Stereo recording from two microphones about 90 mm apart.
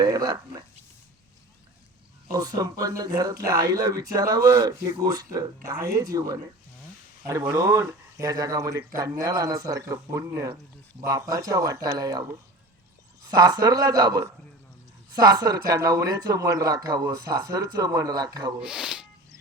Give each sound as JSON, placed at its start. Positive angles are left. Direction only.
{"t": 0.0, "sound": "speech", "side_deg": -45}
{"t": 2.2, "sound": "speech", "side_deg": -40}
{"t": 7.5, "sound": "speech", "side_deg": -35}
{"t": 18.6, "sound": "speech", "side_deg": -10}